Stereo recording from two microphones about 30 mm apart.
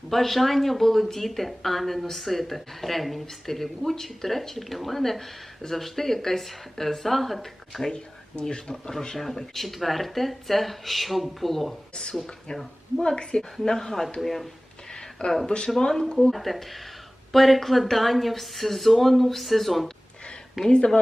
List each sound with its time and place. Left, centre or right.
0.1 s speech: centre
7.9 s speech: left
9.1 s speech: centre
13.0 s speech: left
13.7 s speech: centre
15.4 s speech: left
16.3 s speech: centre
20.7 s speech: left